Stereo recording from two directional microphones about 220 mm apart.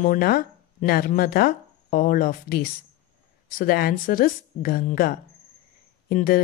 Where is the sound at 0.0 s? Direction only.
40° left (ahead or behind).